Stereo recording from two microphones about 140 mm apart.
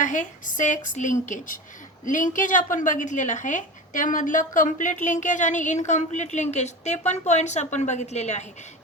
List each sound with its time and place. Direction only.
0.0 s a woman's voice: 60° left (ahead or behind)